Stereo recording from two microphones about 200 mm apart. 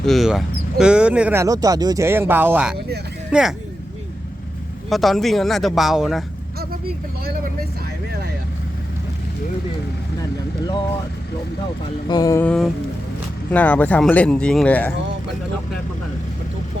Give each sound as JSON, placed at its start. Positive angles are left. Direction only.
{"t": 0.0, "sound": "speech", "side_deg": 0}
{"t": 4.9, "sound": "speech", "side_deg": 0}
{"t": 6.6, "sound": "speech", "side_deg": -50}
{"t": 12.0, "sound": "speech", "side_deg": 20}